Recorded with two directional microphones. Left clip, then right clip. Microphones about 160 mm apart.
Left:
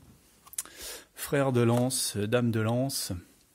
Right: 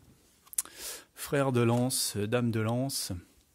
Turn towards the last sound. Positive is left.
turn(degrees=-30)  # may be behind; listen again after turning